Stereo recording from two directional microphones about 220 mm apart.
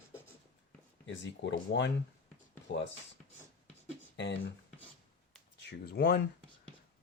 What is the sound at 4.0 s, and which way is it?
Beatboxing, 55° left (ahead or behind).